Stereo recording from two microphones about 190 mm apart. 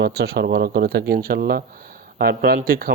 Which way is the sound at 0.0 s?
60° right (ahead or behind).